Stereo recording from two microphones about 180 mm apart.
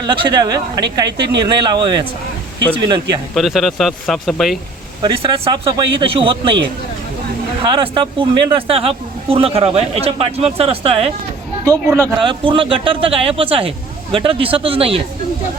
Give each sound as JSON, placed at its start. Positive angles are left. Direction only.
{"t": 0.0, "sound": "speech", "side_deg": -25}
{"t": 3.3, "sound": "speech", "side_deg": 0}
{"t": 5.0, "sound": "speech", "side_deg": -25}
{"t": 11.6, "sound": "speech", "side_deg": -15}